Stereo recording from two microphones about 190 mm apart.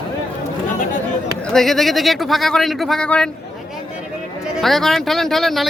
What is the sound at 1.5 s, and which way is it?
Speech, centre (ahead or behind).